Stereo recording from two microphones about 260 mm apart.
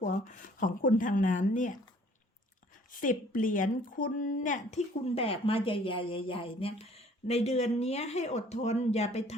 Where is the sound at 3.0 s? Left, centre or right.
Left.